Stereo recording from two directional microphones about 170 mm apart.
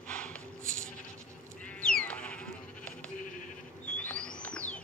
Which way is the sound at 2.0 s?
5° left (ahead or behind).